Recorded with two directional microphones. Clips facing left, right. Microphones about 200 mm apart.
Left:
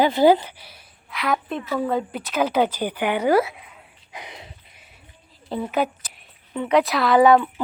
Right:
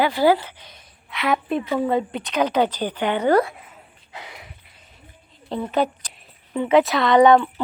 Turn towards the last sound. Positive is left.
turn(degrees=5)  # may be behind; listen again after turning